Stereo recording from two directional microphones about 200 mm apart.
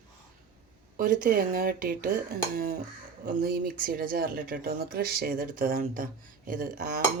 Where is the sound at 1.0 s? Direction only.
45° right (ahead or behind).